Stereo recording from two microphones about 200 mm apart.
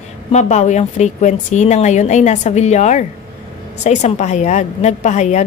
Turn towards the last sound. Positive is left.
turn(degrees=35)  # may be behind; listen again after turning